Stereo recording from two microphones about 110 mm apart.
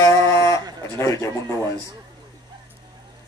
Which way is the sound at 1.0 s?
30° left (ahead or behind).